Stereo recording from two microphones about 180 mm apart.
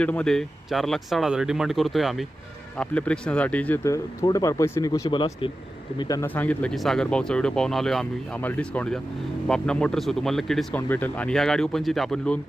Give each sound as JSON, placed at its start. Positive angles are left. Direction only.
{"t": 0.0, "sound": "speech", "side_deg": 5}
{"t": 5.0, "sound": "speech", "side_deg": 30}
{"t": 6.0, "sound": "speech", "side_deg": 20}